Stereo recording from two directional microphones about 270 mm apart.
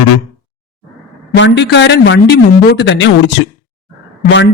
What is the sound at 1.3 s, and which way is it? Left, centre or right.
Speech, left.